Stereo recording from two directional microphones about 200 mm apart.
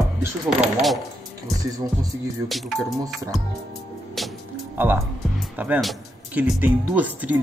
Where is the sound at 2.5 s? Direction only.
Centre (ahead or behind).